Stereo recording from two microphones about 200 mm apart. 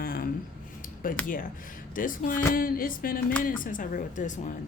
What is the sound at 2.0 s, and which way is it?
A woman's voice, 40° left (ahead or behind).